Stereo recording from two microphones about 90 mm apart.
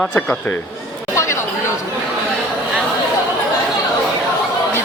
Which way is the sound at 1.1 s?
30° left (ahead or behind).